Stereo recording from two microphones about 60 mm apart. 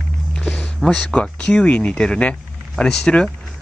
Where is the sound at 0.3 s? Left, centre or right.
Centre.